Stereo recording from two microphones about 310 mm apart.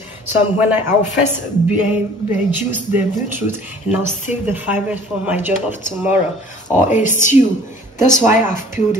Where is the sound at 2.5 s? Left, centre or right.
Centre.